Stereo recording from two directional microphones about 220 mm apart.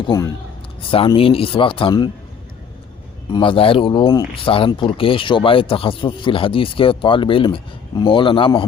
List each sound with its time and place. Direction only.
0.0 s speech: 15° left (ahead or behind)
3.3 s speech: 25° left (ahead or behind)